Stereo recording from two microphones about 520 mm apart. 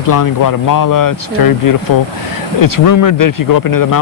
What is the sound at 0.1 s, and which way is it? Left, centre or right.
Speech, left.